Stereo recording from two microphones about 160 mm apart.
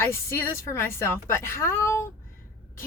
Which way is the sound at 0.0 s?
15° left (ahead or behind).